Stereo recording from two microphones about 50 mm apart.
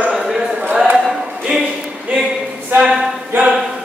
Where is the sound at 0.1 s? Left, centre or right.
Centre.